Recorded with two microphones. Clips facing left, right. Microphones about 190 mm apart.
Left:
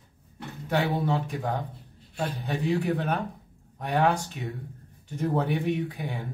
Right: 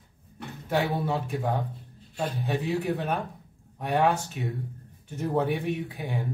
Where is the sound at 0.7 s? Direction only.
Centre (ahead or behind).